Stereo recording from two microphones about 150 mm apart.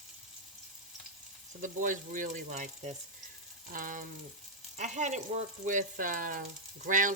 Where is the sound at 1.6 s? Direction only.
60° right (ahead or behind).